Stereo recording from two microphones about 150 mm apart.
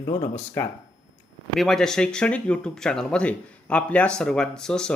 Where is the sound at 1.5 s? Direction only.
5° left (ahead or behind).